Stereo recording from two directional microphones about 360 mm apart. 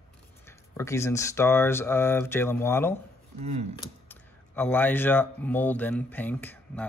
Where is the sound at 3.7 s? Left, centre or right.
Centre.